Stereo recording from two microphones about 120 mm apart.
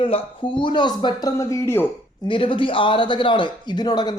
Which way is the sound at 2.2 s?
45° left (ahead or behind).